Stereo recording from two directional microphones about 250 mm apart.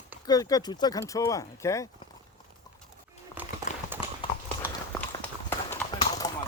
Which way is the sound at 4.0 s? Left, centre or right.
Left.